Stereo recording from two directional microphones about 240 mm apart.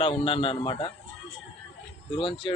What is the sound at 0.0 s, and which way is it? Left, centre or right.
Speech, left.